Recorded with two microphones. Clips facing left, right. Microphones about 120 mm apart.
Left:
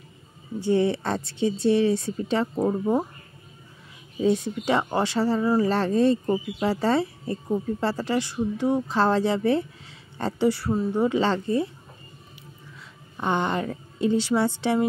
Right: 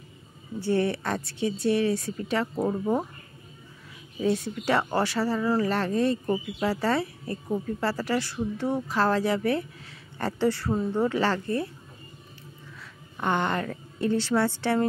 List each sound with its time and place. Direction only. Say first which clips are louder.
0.6 s speech: left 3 dB; 20° left (ahead or behind)
2.6 s a woman's voice: left 3 dB; 15° left (ahead or behind)
4.2 s speech: left 3 dB; 20° left (ahead or behind)
5.7 s speech: left 4 dB; 30° left (ahead or behind)
13.2 s a woman's voice: left 1 dB; 15° left (ahead or behind)